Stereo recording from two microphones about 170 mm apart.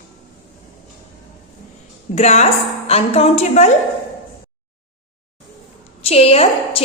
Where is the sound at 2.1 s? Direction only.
40° left (ahead or behind).